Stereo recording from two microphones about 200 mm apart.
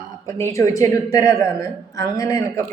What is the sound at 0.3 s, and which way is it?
Speech, 15° left (ahead or behind).